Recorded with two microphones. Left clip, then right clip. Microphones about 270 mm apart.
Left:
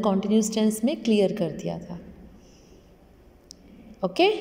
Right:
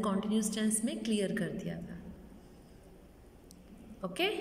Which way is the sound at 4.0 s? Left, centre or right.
Centre.